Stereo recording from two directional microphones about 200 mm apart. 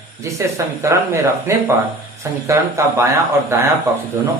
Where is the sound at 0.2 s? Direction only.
15° right (ahead or behind).